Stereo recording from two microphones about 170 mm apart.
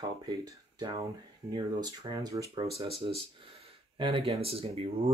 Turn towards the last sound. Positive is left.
turn(degrees=-35)  # may be behind; listen again after turning